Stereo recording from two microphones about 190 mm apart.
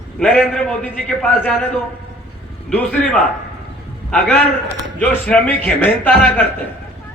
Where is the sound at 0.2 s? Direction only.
5° left (ahead or behind).